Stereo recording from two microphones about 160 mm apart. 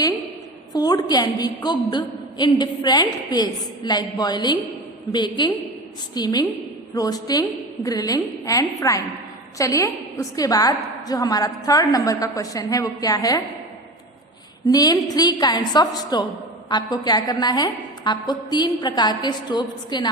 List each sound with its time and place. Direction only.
0.7 s a woman's voice: 25° left (ahead or behind)
14.7 s a woman's voice: 25° left (ahead or behind)